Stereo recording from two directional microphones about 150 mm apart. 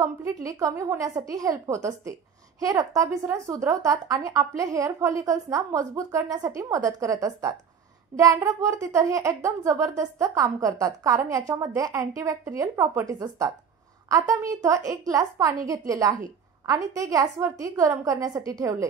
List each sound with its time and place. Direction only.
0.0 s a child's voice: 20° right (ahead or behind)